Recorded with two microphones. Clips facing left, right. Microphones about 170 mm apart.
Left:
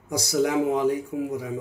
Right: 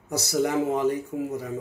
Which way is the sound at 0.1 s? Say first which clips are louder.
Left 1 dB; 10° left (ahead or behind).